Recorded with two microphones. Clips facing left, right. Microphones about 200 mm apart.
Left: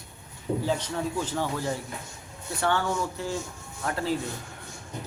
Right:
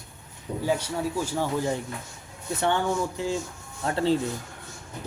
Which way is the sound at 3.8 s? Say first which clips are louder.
Right 5 dB; 30° right (ahead or behind).